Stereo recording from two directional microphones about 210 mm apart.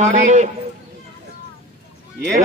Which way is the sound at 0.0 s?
35° right (ahead or behind).